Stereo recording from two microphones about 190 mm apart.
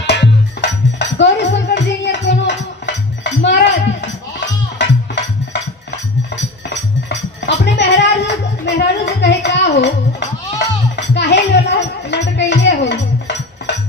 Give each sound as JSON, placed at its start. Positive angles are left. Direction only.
{"t": 0.0, "sound": "music", "side_deg": 65}
{"t": 11.0, "sound": "music", "side_deg": 65}